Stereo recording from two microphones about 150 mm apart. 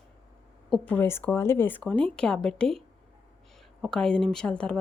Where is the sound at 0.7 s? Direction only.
10° left (ahead or behind).